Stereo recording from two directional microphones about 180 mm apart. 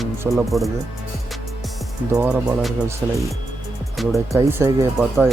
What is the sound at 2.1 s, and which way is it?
Speech, 15° right (ahead or behind).